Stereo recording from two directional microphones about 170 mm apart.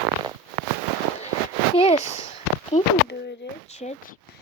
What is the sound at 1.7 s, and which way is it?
Speech, 35° left (ahead or behind).